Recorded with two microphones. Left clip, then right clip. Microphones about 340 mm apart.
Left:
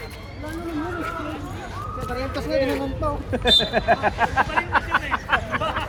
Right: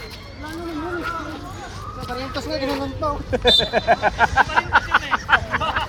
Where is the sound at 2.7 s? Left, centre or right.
Centre.